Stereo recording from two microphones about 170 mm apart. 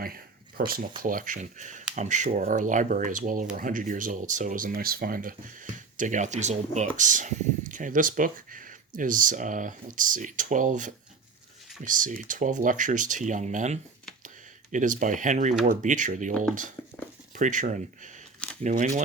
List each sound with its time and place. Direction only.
0.0 s a sound: 60° right (ahead or behind)
1.0 s speech: 50° right (ahead or behind)
17.3 s speech: 50° right (ahead or behind)